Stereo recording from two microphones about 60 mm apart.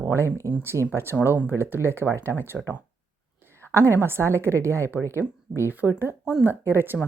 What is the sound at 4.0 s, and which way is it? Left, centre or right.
Speech, right.